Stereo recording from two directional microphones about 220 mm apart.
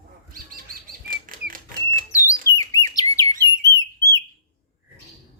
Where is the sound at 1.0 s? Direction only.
40° right (ahead or behind).